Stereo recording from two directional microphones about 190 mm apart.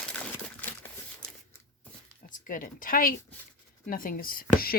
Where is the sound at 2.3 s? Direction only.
45° left (ahead or behind).